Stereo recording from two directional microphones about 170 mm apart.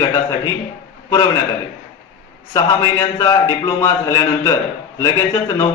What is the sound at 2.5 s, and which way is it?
Speech, 25° left (ahead or behind).